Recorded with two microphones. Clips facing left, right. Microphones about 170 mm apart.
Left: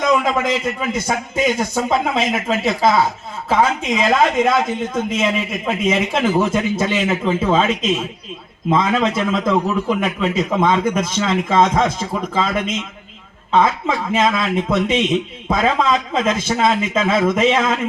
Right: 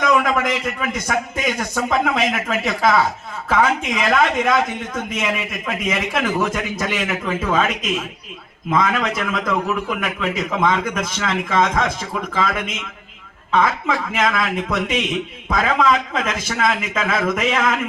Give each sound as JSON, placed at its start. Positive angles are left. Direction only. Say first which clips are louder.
{"t": 0.0, "sound": "a man's voice", "louder": "left 1 dB", "side_deg": 25}